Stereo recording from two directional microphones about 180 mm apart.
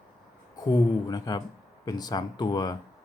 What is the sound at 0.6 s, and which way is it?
Speech, 20° left (ahead or behind).